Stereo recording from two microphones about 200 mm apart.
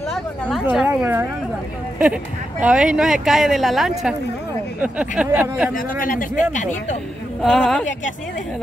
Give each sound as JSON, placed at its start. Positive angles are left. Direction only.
{"t": 0.1, "sound": "a woman's voice", "side_deg": 0}
{"t": 2.6, "sound": "speech", "side_deg": -5}
{"t": 5.8, "sound": "a man's voice", "side_deg": 45}
{"t": 7.4, "sound": "speech", "side_deg": 5}